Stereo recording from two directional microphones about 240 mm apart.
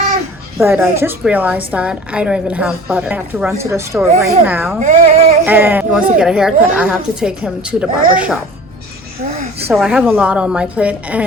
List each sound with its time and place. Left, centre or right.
0.6 s a woman's voice: centre
4.8 s female singing: right
5.5 s a woman's voice: centre
9.6 s a woman's voice: centre